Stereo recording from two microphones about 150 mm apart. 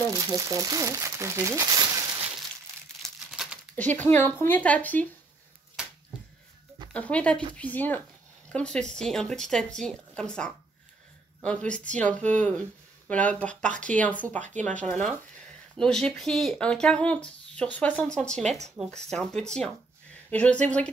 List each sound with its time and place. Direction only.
0.1 s speech: 25° right (ahead or behind)
3.0 s crumpling: centre (ahead or behind)
6.9 s speech: 10° left (ahead or behind)